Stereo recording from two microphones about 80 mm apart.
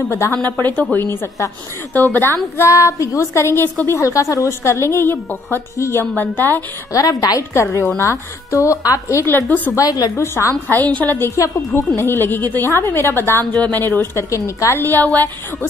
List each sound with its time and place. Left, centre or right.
0.3 s a woman's voice: left
2.1 s speech: right
2.5 s a woman's voice: left
6.9 s a woman's voice: left
7.5 s a woman's voice: left
9.2 s a woman's voice: left
9.8 s a woman's voice: left
10.1 s a woman's voice: left
11.0 s a woman's voice: left
11.2 s a woman's voice: left
12.0 s a woman's voice: left
14.3 s a woman's voice: left